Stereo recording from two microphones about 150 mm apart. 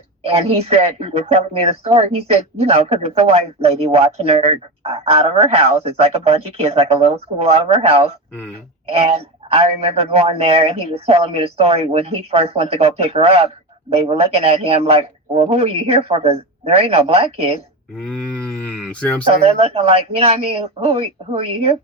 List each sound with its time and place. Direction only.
0.3 s a man's voice: 45° right (ahead or behind)
17.9 s a sound: 5° left (ahead or behind)
19.2 s a man's voice: 40° right (ahead or behind)